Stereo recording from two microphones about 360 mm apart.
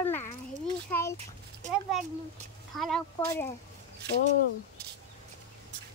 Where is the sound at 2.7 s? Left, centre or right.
Centre.